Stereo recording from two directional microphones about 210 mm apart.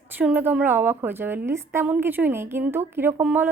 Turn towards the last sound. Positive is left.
turn(degrees=-10)  # may be behind; listen again after turning